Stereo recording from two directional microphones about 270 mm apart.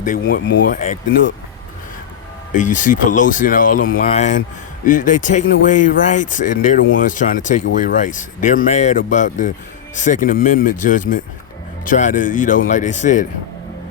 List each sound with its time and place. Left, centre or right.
0.0 s speech: left
2.5 s speech: left